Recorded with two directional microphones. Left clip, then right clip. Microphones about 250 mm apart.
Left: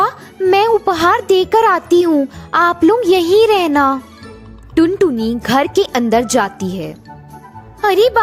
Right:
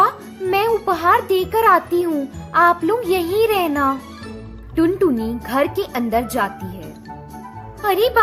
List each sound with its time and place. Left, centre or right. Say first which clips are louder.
0.5 s a child's voice: left 5 dB; left